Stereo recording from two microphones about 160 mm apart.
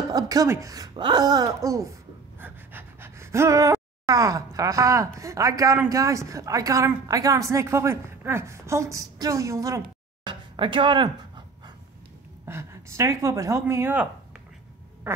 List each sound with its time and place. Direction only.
0.1 s a woman's voice: 20° right (ahead or behind)
10.2 s pant: 30° right (ahead or behind)
12.4 s speech: 15° right (ahead or behind)
15.1 s quack: 15° right (ahead or behind)